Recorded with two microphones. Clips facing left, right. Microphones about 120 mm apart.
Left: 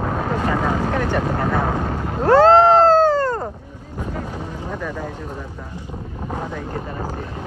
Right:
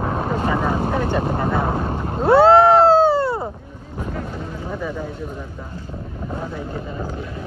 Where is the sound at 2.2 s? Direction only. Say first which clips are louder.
Even; 10° right (ahead or behind).